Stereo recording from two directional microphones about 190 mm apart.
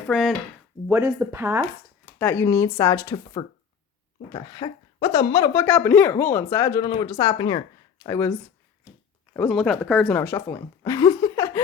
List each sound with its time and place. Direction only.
0.1 s speech: centre (ahead or behind)
0.9 s speech: 15° right (ahead or behind)
2.1 s speech: 10° left (ahead or behind)
3.4 s speech: 30° left (ahead or behind)
5.6 s speech: 10° left (ahead or behind)
9.3 s speech: 5° left (ahead or behind)
10.2 s a woman's voice: 10° left (ahead or behind)